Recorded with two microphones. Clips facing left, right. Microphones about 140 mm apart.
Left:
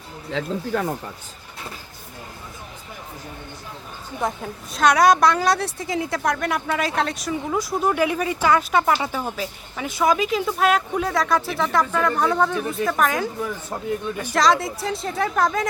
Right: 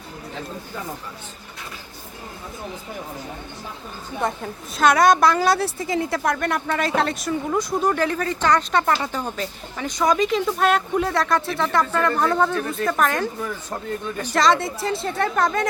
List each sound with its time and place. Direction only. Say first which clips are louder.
0.3 s speech: left 10 dB; 80° left
4.2 s a woman's voice: right 1 dB; centre (ahead or behind)